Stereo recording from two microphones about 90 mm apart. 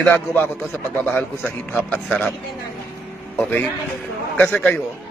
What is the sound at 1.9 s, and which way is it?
Speech, 10° left (ahead or behind).